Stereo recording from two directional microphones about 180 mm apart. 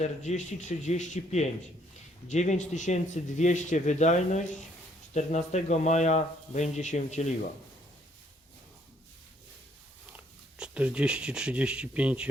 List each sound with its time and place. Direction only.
0.0 s speech: 40° left (ahead or behind)
10.6 s speech: 5° right (ahead or behind)